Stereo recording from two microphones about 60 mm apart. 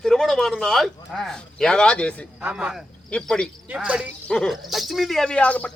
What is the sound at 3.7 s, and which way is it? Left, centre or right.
Speech, centre.